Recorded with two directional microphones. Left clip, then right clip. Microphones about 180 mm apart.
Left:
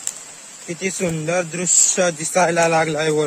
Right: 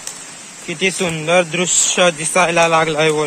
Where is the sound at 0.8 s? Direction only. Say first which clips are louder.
Right 5 dB; 10° left (ahead or behind).